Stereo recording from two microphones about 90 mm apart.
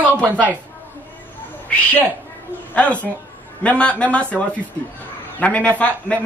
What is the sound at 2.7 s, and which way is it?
Speech, 15° left (ahead or behind).